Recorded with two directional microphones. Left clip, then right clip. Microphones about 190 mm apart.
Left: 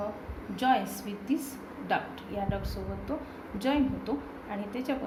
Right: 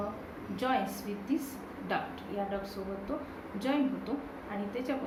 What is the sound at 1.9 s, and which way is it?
Speech, 60° left (ahead or behind).